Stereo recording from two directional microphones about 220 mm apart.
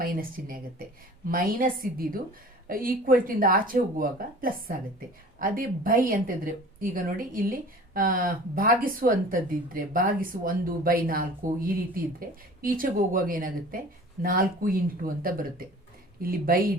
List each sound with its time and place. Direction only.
0.0 s speech: 40° right (ahead or behind)